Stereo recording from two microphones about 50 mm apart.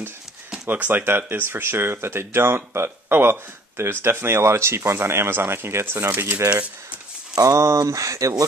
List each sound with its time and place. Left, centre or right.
0.7 s speech: right
1.0 s speech: right
7.4 s speech: right